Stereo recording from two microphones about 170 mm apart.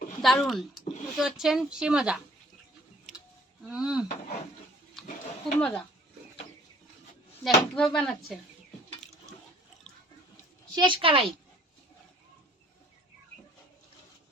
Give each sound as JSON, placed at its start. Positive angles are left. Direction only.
{"t": 0.2, "sound": "speech", "side_deg": 0}
{"t": 3.7, "sound": "speech", "side_deg": -5}
{"t": 5.0, "sound": "a sound", "side_deg": 0}
{"t": 5.5, "sound": "speech", "side_deg": 5}
{"t": 7.4, "sound": "speech", "side_deg": 5}
{"t": 10.8, "sound": "a woman's voice", "side_deg": -30}